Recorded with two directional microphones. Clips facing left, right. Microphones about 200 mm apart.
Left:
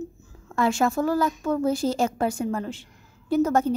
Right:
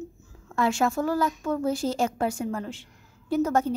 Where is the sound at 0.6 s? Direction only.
40° left (ahead or behind).